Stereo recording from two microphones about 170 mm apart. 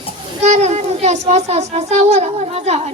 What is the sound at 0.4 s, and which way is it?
A child's voice, 40° right (ahead or behind).